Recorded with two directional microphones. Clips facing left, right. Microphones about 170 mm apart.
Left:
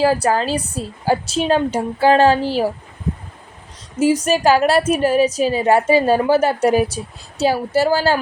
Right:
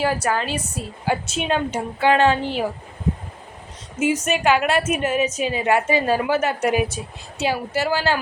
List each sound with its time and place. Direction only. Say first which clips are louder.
0.0 s a woman's voice: left 6 dB; 35° left (ahead or behind)
4.0 s a woman's voice: left 5 dB; 35° left (ahead or behind)